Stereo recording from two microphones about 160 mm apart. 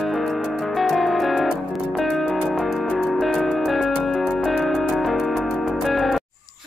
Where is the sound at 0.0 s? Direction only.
Centre (ahead or behind).